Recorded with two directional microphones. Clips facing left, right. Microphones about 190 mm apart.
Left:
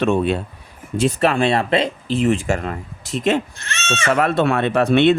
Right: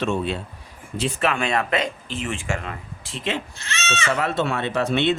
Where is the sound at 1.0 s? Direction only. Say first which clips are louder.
Left 6 dB; 40° left (ahead or behind).